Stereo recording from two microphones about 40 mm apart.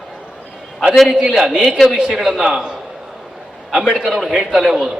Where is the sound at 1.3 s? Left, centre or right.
Centre.